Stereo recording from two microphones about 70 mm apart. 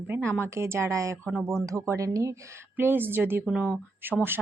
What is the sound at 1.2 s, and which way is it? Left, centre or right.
Speech, centre.